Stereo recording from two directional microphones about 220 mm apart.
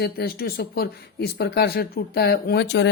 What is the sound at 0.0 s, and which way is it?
Speech, 45° left (ahead or behind).